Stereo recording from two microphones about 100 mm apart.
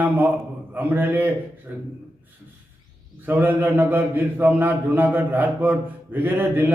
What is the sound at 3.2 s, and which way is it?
A man's voice, 20° right (ahead or behind).